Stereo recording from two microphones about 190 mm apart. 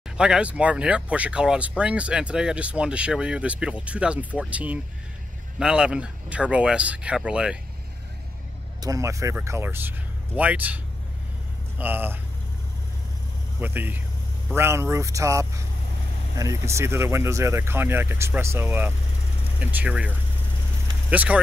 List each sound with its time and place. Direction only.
0.2 s speech: 5° right (ahead or behind)
8.8 s speech: 15° right (ahead or behind)
11.8 s speech: 10° right (ahead or behind)
13.6 s speech: 10° right (ahead or behind)